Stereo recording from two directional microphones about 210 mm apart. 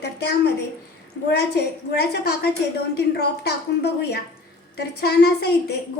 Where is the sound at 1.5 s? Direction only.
50° left (ahead or behind).